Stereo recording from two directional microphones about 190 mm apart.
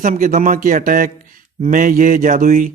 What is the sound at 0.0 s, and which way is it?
Speech, 40° right (ahead or behind).